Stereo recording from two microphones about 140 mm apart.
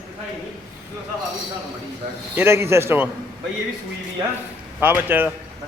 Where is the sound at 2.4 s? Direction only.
20° right (ahead or behind).